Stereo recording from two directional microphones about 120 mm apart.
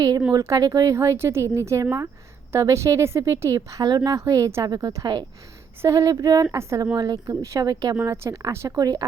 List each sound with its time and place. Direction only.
0.3 s speech: 30° right (ahead or behind)